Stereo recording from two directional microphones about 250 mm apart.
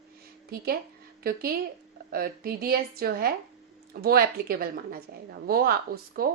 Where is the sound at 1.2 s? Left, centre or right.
Right.